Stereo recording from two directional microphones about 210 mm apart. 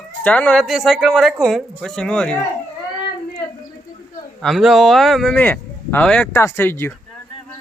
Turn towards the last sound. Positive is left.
turn(degrees=10)  # may be behind; listen again after turning